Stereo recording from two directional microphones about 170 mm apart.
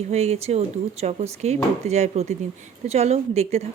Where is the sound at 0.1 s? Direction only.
40° right (ahead or behind).